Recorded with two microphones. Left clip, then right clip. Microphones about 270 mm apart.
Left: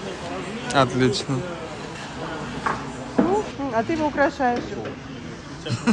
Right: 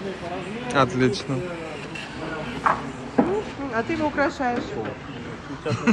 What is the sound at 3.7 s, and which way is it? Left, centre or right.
Speech, left.